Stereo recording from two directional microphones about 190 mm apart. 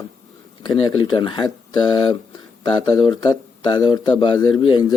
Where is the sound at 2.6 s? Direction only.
25° left (ahead or behind).